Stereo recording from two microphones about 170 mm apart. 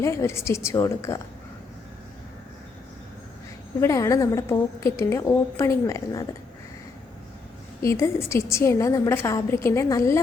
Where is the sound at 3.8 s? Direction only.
20° left (ahead or behind).